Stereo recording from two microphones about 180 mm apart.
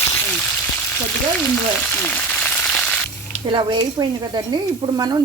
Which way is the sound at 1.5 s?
10° left (ahead or behind).